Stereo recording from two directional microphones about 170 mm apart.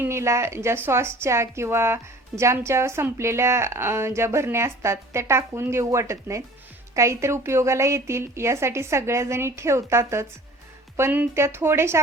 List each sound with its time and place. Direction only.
0.0 s a woman's voice: 15° right (ahead or behind)